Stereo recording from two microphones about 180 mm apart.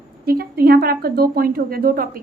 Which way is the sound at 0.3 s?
55° right (ahead or behind).